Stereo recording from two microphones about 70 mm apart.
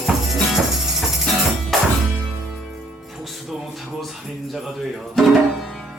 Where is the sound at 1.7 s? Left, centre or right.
Centre.